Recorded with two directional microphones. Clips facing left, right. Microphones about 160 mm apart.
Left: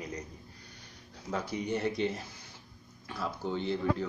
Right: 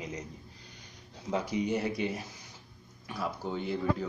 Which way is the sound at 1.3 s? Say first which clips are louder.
Right 3 dB; 15° right (ahead or behind).